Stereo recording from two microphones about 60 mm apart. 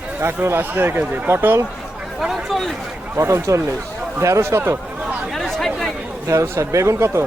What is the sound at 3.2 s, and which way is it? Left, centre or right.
A man's voice, right.